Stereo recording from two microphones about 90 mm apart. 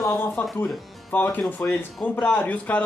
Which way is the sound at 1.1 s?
25° left (ahead or behind).